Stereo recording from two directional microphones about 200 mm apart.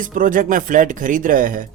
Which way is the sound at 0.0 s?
40° right (ahead or behind).